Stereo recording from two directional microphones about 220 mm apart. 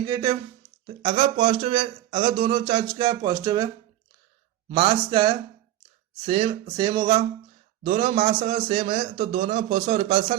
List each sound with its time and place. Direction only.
0.0 s speech: 15° right (ahead or behind)
0.9 s speech: 30° right (ahead or behind)
4.7 s speech: 25° right (ahead or behind)